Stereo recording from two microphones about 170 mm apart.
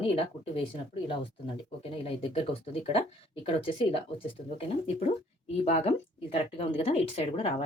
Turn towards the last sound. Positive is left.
turn(degrees=35)  # may be behind; listen again after turning